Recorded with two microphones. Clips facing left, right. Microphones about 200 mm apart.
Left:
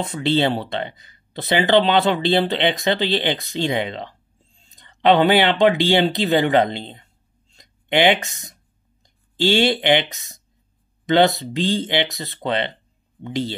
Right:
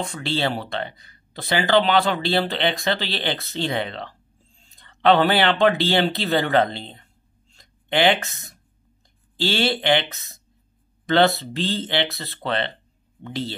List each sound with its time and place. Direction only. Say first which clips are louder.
0.0 s speech: left 5 dB; 20° left (ahead or behind)